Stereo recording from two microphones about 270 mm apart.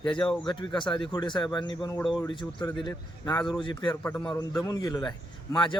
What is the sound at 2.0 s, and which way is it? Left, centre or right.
Speech, centre.